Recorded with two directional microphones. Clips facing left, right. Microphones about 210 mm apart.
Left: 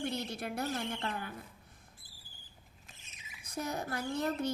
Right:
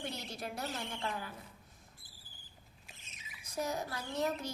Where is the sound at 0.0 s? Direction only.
55° left (ahead or behind).